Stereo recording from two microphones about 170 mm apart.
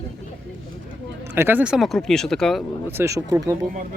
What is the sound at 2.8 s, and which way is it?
Speech, 15° right (ahead or behind).